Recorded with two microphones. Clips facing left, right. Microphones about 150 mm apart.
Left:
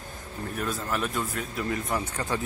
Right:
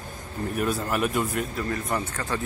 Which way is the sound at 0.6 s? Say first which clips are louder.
Right 4 dB; 10° right (ahead or behind).